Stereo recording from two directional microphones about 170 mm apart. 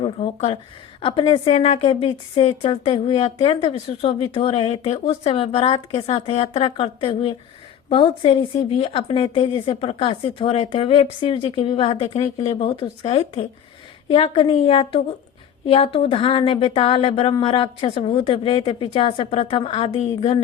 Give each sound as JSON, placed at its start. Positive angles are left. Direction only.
{"t": 0.0, "sound": "a woman's voice", "side_deg": 40}